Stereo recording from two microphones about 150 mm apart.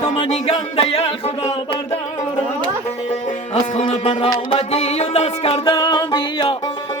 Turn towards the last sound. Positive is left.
turn(degrees=30)  # may be behind; listen again after turning